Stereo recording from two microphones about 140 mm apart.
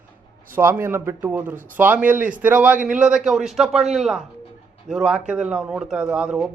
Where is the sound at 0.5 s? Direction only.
15° right (ahead or behind).